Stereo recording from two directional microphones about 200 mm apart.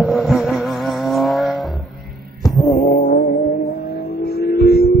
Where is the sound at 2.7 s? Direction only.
40° left (ahead or behind).